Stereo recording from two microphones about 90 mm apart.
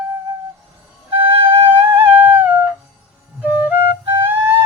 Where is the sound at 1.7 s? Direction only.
25° right (ahead or behind).